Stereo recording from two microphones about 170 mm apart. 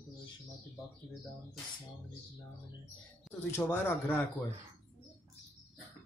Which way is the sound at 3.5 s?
15° left (ahead or behind).